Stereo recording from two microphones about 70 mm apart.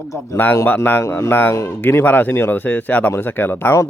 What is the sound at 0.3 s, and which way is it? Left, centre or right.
A man's voice, left.